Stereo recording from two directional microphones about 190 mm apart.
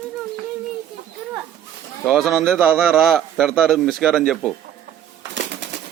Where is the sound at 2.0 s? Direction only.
Centre (ahead or behind).